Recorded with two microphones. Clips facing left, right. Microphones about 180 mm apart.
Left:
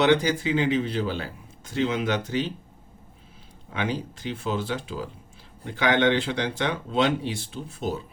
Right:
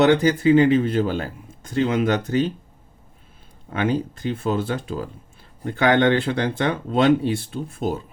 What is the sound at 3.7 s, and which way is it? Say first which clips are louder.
Speech: right 6 dB; 50° right (ahead or behind).